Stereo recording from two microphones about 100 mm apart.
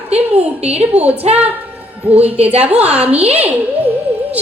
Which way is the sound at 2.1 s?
90° right.